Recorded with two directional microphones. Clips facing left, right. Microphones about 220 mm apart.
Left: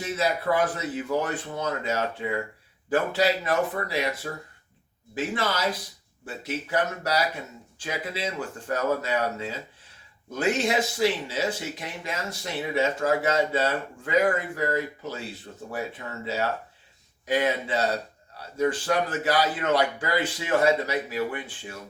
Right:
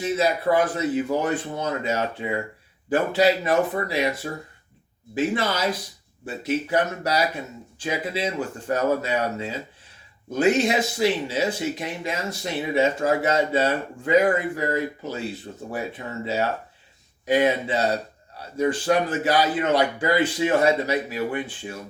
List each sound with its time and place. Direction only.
0.2 s speech: 20° right (ahead or behind)
15.5 s speech: 35° right (ahead or behind)
16.2 s speech: 20° right (ahead or behind)